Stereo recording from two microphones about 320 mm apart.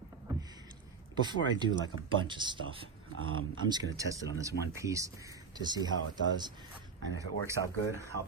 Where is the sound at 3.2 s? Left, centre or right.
Right.